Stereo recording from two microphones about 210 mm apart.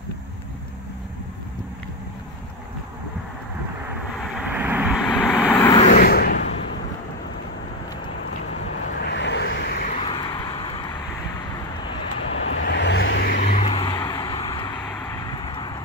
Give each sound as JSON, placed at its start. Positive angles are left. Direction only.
{"t": 4.3, "sound": "vehicle", "side_deg": -5}
{"t": 5.6, "sound": "vehicle", "side_deg": 20}
{"t": 5.9, "sound": "a sound", "side_deg": 45}
{"t": 9.0, "sound": "vehicle", "side_deg": 55}
{"t": 9.9, "sound": "vehicle", "side_deg": 20}
{"t": 12.4, "sound": "vehicle", "side_deg": 65}
{"t": 13.4, "sound": "vehicle", "side_deg": 30}